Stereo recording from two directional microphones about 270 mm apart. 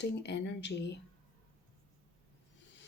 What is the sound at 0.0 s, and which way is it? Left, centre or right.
Speech, left.